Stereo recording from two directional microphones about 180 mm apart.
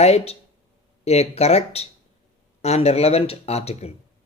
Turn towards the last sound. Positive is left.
turn(degrees=35)  # may be behind; listen again after turning